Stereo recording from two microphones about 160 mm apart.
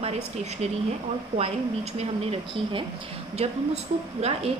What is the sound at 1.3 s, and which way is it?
Speech, 45° right (ahead or behind).